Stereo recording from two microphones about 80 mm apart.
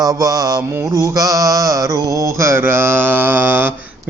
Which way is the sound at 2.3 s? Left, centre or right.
Right.